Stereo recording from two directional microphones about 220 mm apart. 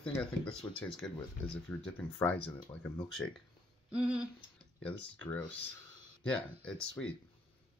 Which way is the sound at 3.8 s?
5° right (ahead or behind).